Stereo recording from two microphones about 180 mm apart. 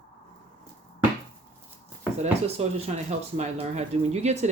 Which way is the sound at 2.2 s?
35° right (ahead or behind).